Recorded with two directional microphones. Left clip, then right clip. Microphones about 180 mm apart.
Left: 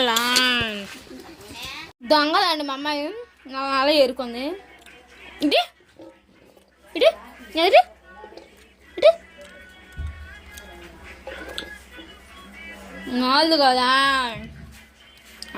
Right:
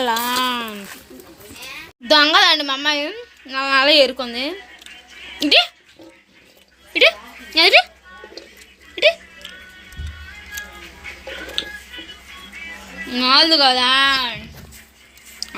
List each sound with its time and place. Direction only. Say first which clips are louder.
0.0 s a sound: even; 5° right (ahead or behind)
2.0 s a child's voice: right 6 dB; 5° left (ahead or behind)
6.9 s speech: right 4 dB; 10° left (ahead or behind)
11.6 s music: right 11 dB; 15° left (ahead or behind)
13.1 s a child's voice: right 5 dB; 20° left (ahead or behind)
15.4 s music: right 6 dB; 10° left (ahead or behind)